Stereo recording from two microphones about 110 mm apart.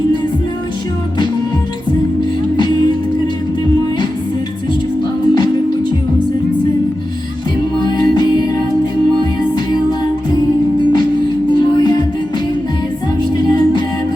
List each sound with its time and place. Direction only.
7.8 s music: 40° left (ahead or behind)
11.8 s music: 40° left (ahead or behind)